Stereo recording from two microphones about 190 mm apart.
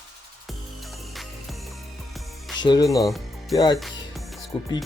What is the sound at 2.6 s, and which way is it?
Speech, 25° left (ahead or behind).